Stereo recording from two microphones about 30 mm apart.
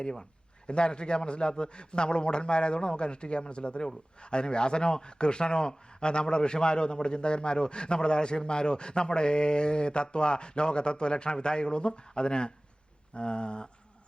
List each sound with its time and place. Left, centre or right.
0.0 s speech: left
0.7 s a man's voice: left